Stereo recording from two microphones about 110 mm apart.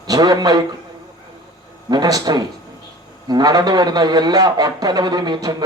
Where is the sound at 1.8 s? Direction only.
40° right (ahead or behind).